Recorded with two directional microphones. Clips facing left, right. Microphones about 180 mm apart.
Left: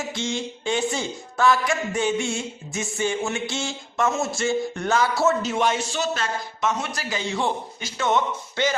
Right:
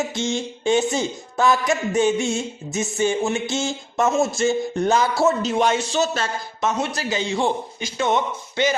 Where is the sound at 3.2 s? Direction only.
20° right (ahead or behind).